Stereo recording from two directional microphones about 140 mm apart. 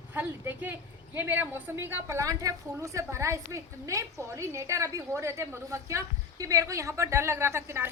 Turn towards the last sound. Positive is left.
turn(degrees=-20)  # may be behind; listen again after turning